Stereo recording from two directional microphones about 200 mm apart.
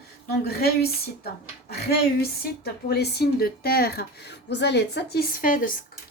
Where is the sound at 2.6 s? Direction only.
55° left (ahead or behind).